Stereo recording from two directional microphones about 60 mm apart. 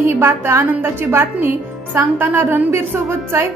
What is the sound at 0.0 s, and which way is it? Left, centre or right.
A woman's voice, right.